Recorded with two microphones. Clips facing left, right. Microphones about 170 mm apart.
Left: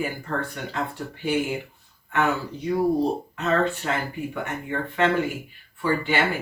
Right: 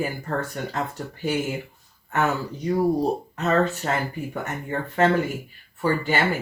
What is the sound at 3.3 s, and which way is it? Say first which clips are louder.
Speech: right 2 dB; 40° right (ahead or behind).